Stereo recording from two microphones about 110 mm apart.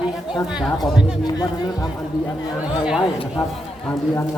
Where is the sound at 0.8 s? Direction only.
40° left (ahead or behind).